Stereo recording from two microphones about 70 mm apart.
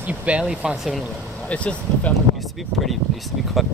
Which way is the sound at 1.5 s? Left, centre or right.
Centre.